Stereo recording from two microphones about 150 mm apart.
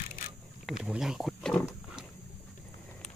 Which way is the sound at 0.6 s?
5° right (ahead or behind).